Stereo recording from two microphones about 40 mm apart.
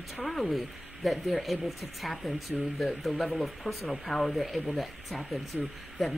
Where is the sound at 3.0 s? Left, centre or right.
Centre.